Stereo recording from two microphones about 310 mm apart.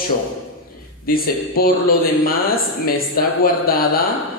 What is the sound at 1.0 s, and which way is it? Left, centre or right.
A man's voice, left.